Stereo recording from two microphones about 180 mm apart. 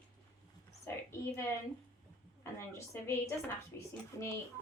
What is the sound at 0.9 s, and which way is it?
Speech, 15° left (ahead or behind).